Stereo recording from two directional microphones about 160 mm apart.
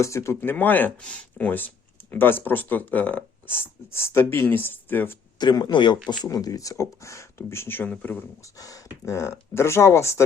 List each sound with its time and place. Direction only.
0.0 s speech: 15° left (ahead or behind)
5.4 s speech: 25° left (ahead or behind)